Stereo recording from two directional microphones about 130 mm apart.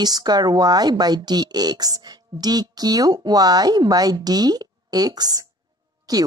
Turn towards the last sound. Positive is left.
turn(degrees=-30)  # may be behind; listen again after turning